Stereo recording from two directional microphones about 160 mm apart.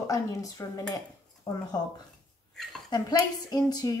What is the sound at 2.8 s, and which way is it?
A woman's voice, 25° left (ahead or behind).